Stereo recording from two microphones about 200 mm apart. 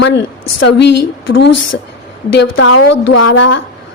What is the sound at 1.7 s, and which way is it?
Speech, 55° left (ahead or behind).